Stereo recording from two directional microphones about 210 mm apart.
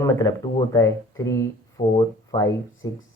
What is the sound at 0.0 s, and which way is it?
Speech, 15° left (ahead or behind).